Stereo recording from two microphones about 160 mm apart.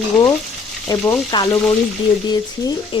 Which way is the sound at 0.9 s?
20° left (ahead or behind).